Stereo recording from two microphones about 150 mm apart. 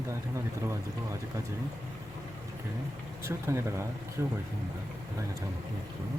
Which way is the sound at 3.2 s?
20° right (ahead or behind).